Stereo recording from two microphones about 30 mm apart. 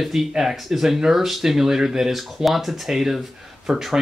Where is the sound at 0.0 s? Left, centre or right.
Centre.